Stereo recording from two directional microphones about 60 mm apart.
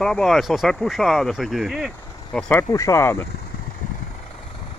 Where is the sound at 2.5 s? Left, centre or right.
Left.